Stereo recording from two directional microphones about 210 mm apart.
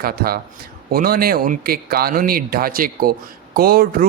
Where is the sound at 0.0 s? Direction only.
45° right (ahead or behind).